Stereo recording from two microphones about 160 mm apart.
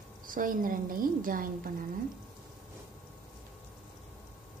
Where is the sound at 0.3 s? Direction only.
60° right (ahead or behind).